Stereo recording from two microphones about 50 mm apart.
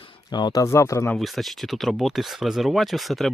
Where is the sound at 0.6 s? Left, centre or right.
Left.